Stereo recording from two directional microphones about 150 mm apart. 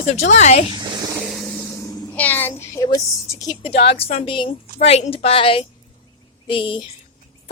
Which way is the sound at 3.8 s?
40° left (ahead or behind).